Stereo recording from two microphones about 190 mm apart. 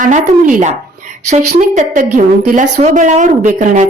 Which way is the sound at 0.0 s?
40° right (ahead or behind).